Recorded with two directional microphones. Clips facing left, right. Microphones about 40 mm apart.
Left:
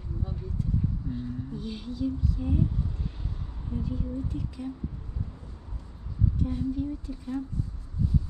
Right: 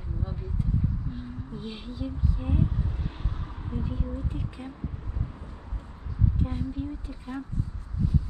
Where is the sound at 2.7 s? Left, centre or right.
Right.